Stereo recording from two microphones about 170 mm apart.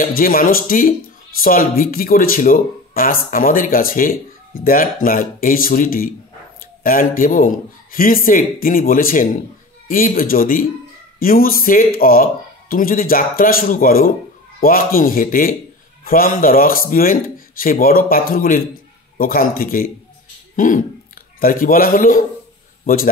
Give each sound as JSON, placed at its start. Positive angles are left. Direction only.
{"t": 0.0, "sound": "speech", "side_deg": 55}